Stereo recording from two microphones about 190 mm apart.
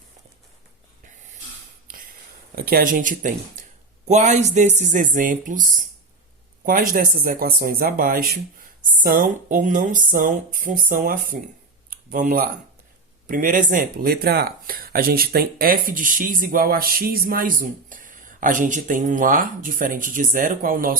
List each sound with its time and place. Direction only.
2.6 s speech: 50° right (ahead or behind)
6.7 s speech: 45° right (ahead or behind)